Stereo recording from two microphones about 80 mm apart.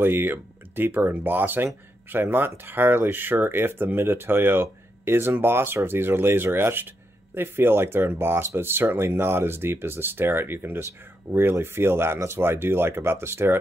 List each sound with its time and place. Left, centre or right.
0.0 s speech: right